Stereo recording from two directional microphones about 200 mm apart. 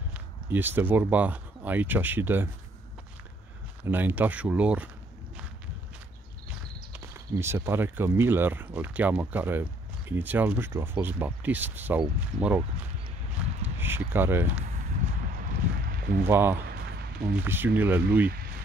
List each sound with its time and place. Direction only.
0.1 s speech: 10° right (ahead or behind)
3.8 s speech: 10° right (ahead or behind)
6.9 s speech: 10° right (ahead or behind)
13.7 s speech: 10° right (ahead or behind)
15.8 s a sound: 50° right (ahead or behind)
16.3 s speech: 10° right (ahead or behind)
16.6 s a sound: 50° right (ahead or behind)
17.4 s speech: 10° right (ahead or behind)